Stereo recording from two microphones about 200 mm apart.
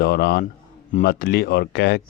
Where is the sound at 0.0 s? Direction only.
55° left (ahead or behind).